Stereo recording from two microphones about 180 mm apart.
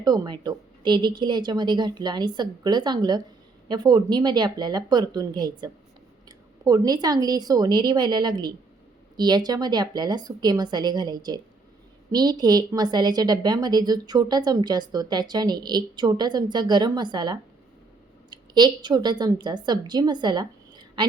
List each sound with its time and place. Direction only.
0.0 s a woman's voice: 25° right (ahead or behind)